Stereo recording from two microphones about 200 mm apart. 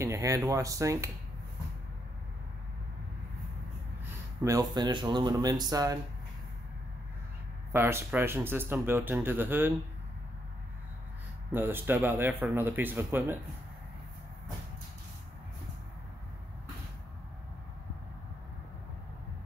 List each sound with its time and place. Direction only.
0.0 s speech: 15° right (ahead or behind)
4.0 s speech: 15° right (ahead or behind)
7.7 s speech: 10° right (ahead or behind)
11.5 s speech: 10° right (ahead or behind)